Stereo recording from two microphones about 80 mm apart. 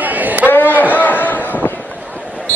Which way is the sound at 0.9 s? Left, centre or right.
Left.